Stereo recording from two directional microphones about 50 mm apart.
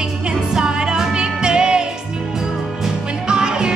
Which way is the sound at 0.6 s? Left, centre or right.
Centre.